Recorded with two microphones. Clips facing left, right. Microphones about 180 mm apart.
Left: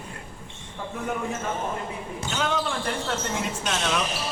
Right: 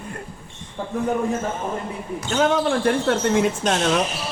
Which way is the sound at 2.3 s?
45° right (ahead or behind).